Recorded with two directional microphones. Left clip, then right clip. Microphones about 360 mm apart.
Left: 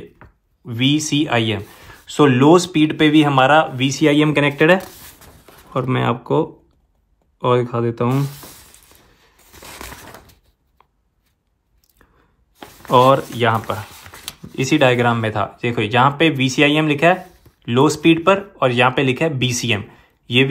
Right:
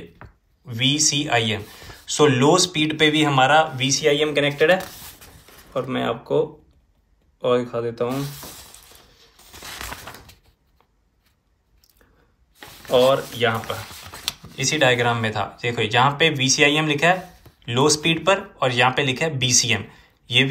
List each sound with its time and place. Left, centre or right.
0.2 s speech: centre
5.9 s speech: centre
7.4 s speech: centre
9.5 s a sound: centre
13.1 s speech: centre